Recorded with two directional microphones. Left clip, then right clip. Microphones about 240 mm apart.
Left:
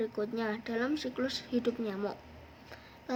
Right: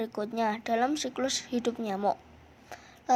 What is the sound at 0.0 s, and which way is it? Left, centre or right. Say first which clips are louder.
A woman's voice: right 4 dB; right.